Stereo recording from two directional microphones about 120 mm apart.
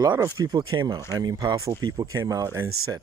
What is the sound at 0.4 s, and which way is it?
Speech, 35° right (ahead or behind).